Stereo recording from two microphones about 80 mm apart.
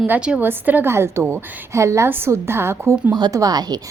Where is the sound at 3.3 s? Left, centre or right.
Right.